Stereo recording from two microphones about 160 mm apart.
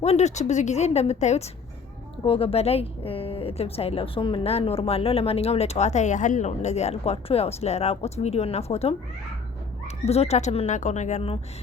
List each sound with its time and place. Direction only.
0.0 s speech: 45° left (ahead or behind)